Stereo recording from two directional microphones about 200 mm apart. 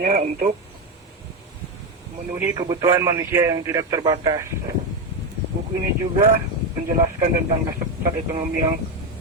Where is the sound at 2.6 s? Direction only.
20° right (ahead or behind).